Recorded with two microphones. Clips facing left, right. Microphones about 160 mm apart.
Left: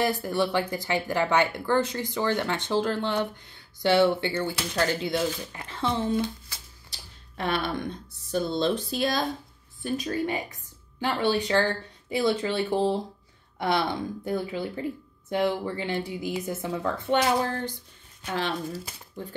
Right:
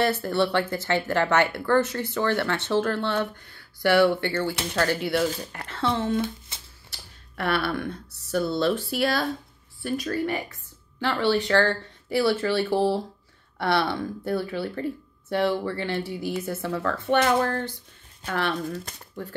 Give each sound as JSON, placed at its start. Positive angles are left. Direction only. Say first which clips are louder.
{"t": 0.0, "sound": "speech", "louder": "right 2 dB", "side_deg": 15}
{"t": 7.3, "sound": "speech", "louder": "right 2 dB", "side_deg": 15}
{"t": 17.2, "sound": "speech", "louder": "right 4 dB", "side_deg": -55}
{"t": 18.3, "sound": "speech", "louder": "right 2 dB", "side_deg": 20}